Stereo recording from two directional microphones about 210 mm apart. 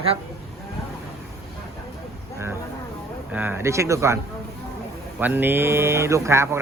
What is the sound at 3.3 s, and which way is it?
Speech, 10° right (ahead or behind).